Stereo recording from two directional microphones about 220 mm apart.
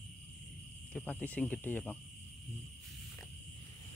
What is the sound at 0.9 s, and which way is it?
Speech, 5° left (ahead or behind).